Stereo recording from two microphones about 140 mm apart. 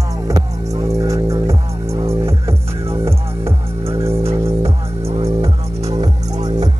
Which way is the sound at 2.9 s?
45° right (ahead or behind).